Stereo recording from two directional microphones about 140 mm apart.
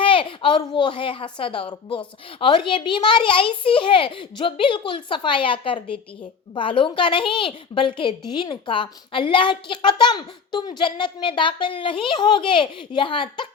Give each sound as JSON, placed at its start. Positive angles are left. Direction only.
{"t": 0.0, "sound": "a woman's voice", "side_deg": 40}